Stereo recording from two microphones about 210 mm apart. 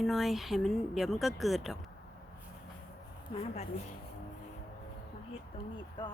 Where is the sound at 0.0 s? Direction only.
Centre (ahead or behind).